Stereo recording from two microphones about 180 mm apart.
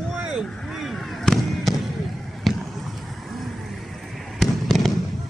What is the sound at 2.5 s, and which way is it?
Basketball bounce, centre (ahead or behind).